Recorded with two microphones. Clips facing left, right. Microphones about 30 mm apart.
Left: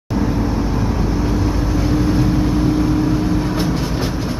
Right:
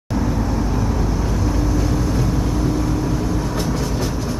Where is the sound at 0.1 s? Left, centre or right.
Left.